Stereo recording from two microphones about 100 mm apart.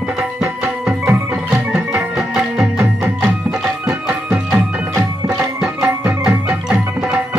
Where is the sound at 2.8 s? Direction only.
20° right (ahead or behind).